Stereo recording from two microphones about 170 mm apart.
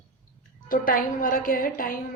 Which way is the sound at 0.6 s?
55° left (ahead or behind).